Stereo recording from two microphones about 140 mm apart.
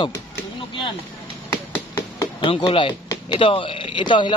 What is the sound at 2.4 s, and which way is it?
Speech, 35° left (ahead or behind).